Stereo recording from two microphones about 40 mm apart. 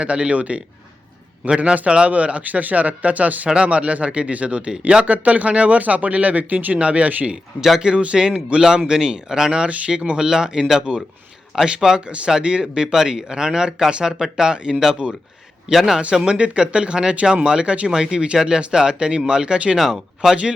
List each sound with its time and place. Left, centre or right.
0.0 s speech: right
5.0 s speech: right
6.7 s speech: right
7.8 s speech: right
11.9 s speech: right
15.7 s a man's voice: centre
16.1 s speech: right
19.7 s speech: centre